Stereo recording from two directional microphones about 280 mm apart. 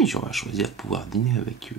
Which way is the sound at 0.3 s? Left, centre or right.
Centre.